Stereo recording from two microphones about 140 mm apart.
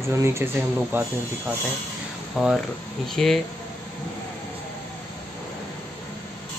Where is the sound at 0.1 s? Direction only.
20° right (ahead or behind).